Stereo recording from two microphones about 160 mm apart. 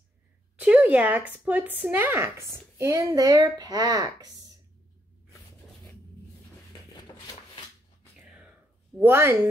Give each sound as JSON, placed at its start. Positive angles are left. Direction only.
{"t": 0.6, "sound": "a child's voice", "side_deg": -10}
{"t": 6.9, "sound": "a sound", "side_deg": 25}
{"t": 8.2, "sound": "whispering", "side_deg": -5}
{"t": 9.0, "sound": "speech", "side_deg": -15}